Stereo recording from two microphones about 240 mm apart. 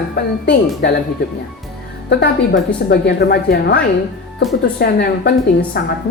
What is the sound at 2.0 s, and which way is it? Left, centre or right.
A woman's voice, left.